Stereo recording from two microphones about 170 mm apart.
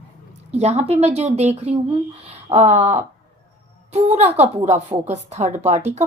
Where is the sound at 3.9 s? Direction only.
40° right (ahead or behind).